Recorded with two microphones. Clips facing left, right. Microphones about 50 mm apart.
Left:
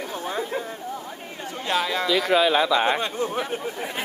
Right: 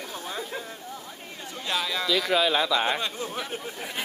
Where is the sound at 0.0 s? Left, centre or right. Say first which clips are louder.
Left 6 dB; left.